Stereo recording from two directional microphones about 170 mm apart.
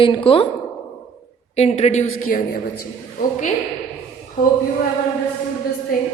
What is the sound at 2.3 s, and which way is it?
Speech, 60° left (ahead or behind).